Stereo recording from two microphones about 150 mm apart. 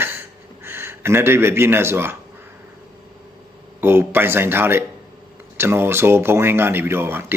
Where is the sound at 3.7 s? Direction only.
15° right (ahead or behind).